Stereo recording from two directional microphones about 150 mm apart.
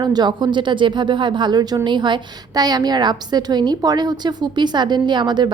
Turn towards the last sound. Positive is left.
turn(degrees=-30)  # may be behind; listen again after turning